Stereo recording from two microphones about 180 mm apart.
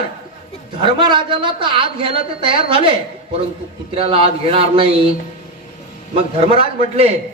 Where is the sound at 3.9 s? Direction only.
30° right (ahead or behind).